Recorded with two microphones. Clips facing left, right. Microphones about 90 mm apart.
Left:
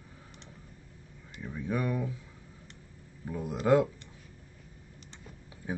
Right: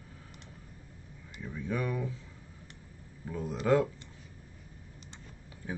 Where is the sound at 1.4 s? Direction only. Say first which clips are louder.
Left 2 dB; 15° left (ahead or behind).